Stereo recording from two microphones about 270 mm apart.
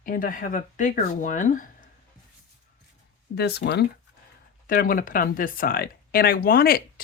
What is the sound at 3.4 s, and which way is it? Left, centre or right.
Speech, left.